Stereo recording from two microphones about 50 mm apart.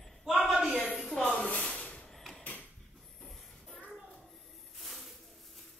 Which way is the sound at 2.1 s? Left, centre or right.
Centre.